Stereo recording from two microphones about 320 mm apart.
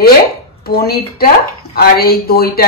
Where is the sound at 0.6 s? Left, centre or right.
Left.